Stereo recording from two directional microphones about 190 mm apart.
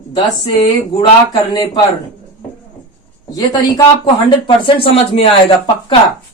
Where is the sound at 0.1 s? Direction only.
25° left (ahead or behind).